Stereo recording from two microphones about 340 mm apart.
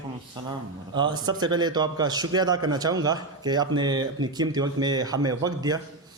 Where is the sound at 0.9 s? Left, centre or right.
Centre.